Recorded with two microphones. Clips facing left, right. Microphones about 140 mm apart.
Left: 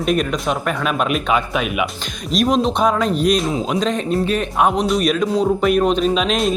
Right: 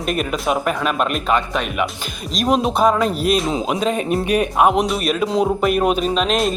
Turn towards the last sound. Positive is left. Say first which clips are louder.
# left 1 dB
turn(degrees=0)  # may be behind; listen again after turning